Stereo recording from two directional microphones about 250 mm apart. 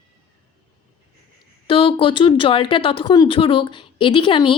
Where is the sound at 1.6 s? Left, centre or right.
Left.